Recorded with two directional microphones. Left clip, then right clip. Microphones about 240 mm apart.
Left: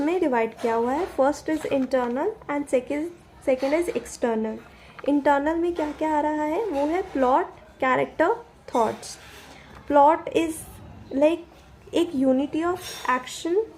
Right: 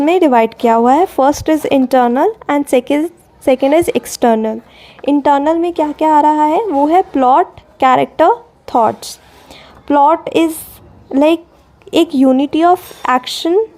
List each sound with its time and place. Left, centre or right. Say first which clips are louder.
0.0 s speech: right 13 dB; right